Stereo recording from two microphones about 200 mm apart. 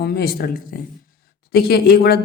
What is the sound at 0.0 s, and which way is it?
A woman's voice, 50° left (ahead or behind).